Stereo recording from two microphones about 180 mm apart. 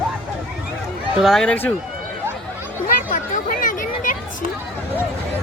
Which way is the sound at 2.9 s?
50° left (ahead or behind).